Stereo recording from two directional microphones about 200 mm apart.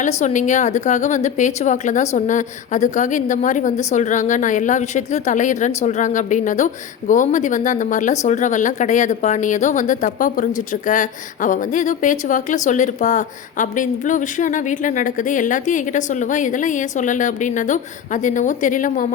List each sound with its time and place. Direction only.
0.2 s speech: 35° left (ahead or behind)